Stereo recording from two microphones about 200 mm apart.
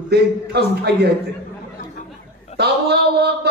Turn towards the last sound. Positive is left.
turn(degrees=-55)  # may be behind; listen again after turning